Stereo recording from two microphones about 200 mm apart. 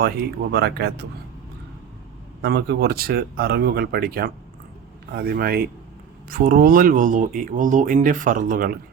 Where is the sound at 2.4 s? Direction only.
55° right (ahead or behind).